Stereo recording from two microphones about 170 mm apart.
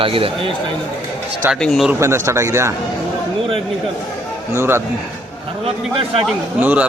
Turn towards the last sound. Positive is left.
turn(degrees=-10)  # may be behind; listen again after turning